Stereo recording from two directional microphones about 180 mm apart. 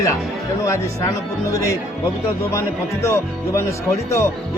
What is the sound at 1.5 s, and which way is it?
Speech, 15° left (ahead or behind).